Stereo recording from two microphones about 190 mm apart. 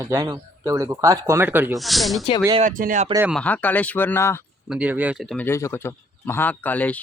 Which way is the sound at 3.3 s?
10° left (ahead or behind).